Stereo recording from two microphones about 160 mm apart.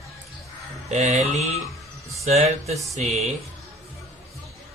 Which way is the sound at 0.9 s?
45° right (ahead or behind).